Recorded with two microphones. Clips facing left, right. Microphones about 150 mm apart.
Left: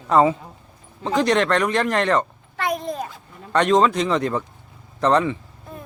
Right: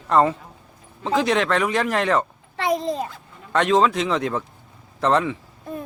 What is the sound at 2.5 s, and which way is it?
Babbling, 30° right (ahead or behind).